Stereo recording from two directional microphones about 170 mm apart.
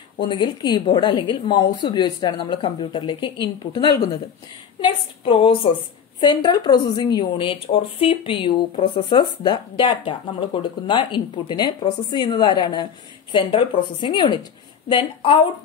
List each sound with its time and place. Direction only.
0.2 s a woman's voice: 30° left (ahead or behind)